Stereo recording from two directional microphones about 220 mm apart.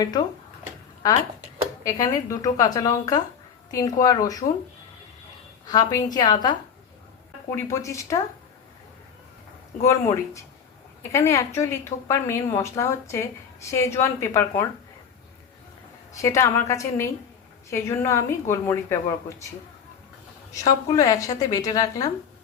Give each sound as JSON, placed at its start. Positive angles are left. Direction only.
{"t": 0.0, "sound": "a woman's voice", "side_deg": 15}
{"t": 1.8, "sound": "a woman's voice", "side_deg": 15}
{"t": 5.6, "sound": "a woman's voice", "side_deg": 15}
{"t": 9.8, "sound": "a woman's voice", "side_deg": 15}
{"t": 16.1, "sound": "a woman's voice", "side_deg": 15}
{"t": 20.5, "sound": "a woman's voice", "side_deg": 15}